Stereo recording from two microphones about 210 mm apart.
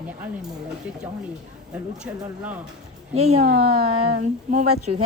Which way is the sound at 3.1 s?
30° right (ahead or behind).